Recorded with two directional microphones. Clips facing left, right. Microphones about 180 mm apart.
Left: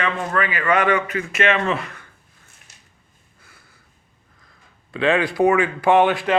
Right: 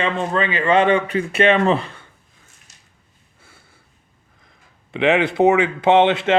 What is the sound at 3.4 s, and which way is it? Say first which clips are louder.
Sniff: right 2 dB; 25° right (ahead or behind).